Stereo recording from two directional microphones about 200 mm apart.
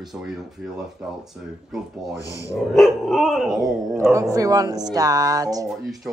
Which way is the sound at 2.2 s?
15° left (ahead or behind).